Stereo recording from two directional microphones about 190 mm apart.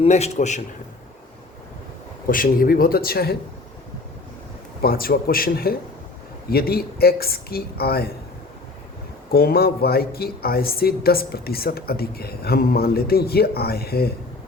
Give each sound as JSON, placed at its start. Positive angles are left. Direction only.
{"t": 0.0, "sound": "a man's voice", "side_deg": 35}
{"t": 2.2, "sound": "speech", "side_deg": 50}
{"t": 4.8, "sound": "speech", "side_deg": 50}
{"t": 9.3, "sound": "speech", "side_deg": 55}